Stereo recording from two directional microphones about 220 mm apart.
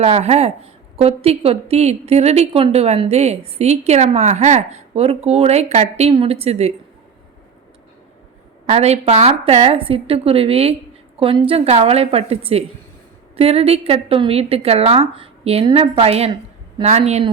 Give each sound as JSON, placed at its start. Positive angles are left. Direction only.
{"t": 0.0, "sound": "a woman's voice", "side_deg": -30}
{"t": 8.6, "sound": "a woman's voice", "side_deg": -30}